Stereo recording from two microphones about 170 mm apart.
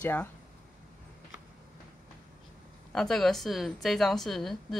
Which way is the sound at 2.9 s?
Centre (ahead or behind).